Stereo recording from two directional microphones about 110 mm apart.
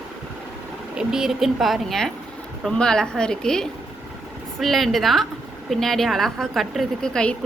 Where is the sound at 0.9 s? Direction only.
5° right (ahead or behind).